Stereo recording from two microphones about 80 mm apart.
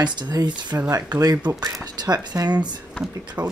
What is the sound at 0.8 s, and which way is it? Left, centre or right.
Speech, right.